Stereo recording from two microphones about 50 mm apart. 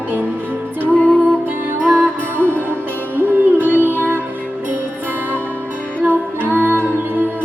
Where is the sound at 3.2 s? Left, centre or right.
Right.